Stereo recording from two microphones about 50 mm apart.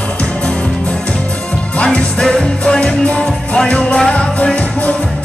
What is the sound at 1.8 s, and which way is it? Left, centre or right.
Music, centre.